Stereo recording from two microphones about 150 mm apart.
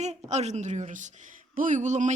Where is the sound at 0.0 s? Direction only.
50° right (ahead or behind).